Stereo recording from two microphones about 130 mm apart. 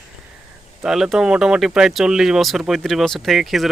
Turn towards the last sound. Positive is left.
turn(degrees=0)  # may be behind; listen again after turning